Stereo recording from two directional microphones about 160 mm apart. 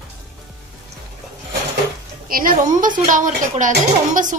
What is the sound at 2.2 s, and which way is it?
Speech, 60° right (ahead or behind).